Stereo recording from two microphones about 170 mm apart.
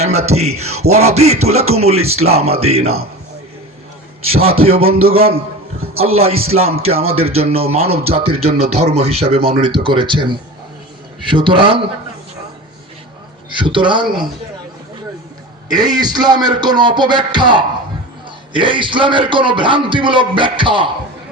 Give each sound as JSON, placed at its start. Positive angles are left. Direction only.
{"t": 0.0, "sound": "music", "side_deg": -40}
{"t": 4.3, "sound": "music", "side_deg": -35}
{"t": 11.2, "sound": "a man's voice", "side_deg": -30}
{"t": 13.5, "sound": "a man's voice", "side_deg": -30}
{"t": 15.7, "sound": "a man's voice", "side_deg": -25}